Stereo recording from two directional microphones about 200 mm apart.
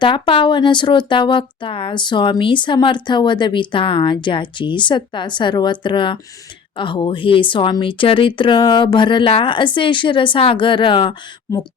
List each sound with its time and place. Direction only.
0.0 s speech: 25° left (ahead or behind)